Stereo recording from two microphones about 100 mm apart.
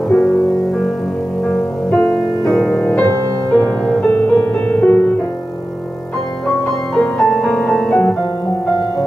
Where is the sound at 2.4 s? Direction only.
5° left (ahead or behind).